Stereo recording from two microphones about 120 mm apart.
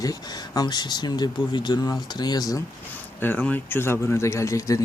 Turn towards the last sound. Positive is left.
turn(degrees=25)  # may be behind; listen again after turning